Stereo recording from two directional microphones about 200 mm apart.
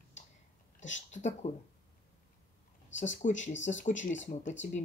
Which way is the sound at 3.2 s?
35° left (ahead or behind).